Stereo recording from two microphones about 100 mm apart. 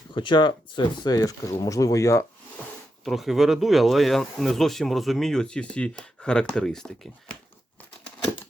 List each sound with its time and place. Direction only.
0.1 s speech: 50° left (ahead or behind); by 2.2 s 30° left (ahead or behind)
3.0 s speech: centre (ahead or behind)